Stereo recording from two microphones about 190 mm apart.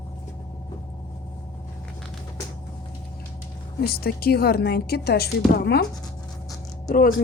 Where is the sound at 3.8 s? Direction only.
55° left (ahead or behind).